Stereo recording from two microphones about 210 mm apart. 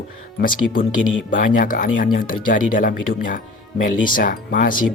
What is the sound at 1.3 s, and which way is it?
Speech, 40° left (ahead or behind).